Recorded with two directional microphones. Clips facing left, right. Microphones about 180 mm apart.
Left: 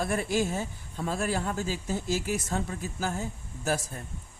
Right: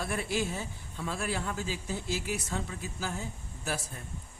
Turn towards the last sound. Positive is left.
turn(degrees=45)  # may be behind; listen again after turning